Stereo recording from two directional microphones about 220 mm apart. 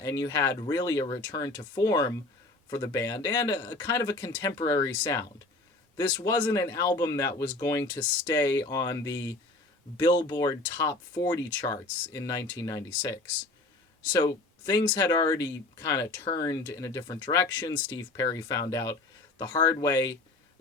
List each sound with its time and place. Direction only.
0.0 s speech: 15° left (ahead or behind)
6.0 s speech: 20° left (ahead or behind)
14.1 s speech: 20° left (ahead or behind)